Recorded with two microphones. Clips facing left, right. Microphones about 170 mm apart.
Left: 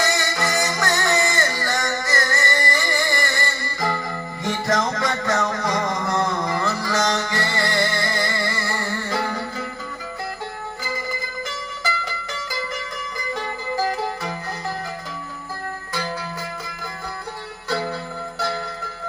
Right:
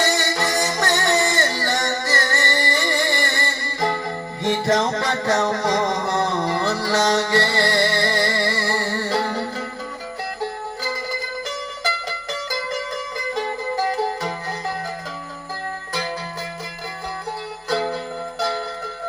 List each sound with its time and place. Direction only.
0.0 s music: 30° right (ahead or behind)
11.4 s music: 40° right (ahead or behind)
13.9 s music: 35° right (ahead or behind)
18.3 s music: 40° right (ahead or behind)